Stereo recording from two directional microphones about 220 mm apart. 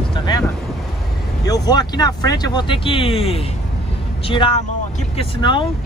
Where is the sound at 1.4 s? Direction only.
15° left (ahead or behind).